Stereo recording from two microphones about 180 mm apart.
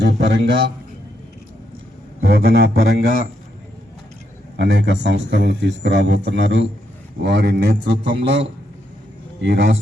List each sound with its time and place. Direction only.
0.0 s a man's voice: 75° right (ahead or behind)
2.2 s a man's voice: 65° right (ahead or behind)
4.5 s a man's voice: 70° right (ahead or behind)